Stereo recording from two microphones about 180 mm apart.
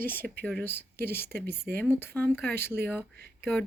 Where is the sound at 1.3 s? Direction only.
60° right (ahead or behind).